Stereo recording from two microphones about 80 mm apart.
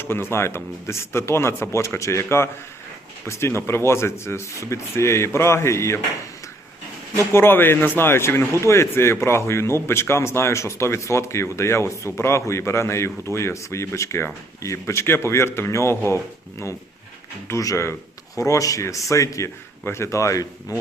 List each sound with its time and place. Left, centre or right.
0.0 s speech: left
7.3 s a man's voice: left